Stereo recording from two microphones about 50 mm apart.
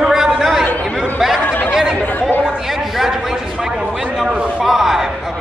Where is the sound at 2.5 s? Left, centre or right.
Centre.